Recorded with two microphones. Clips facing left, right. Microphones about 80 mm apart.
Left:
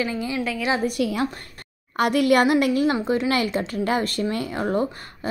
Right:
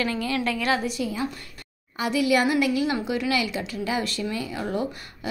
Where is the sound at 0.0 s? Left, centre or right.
Centre.